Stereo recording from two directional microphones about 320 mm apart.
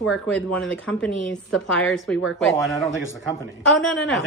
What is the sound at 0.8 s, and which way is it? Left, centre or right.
A man's voice, centre.